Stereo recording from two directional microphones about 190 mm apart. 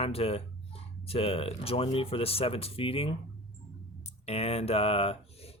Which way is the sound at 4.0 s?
35° left (ahead or behind).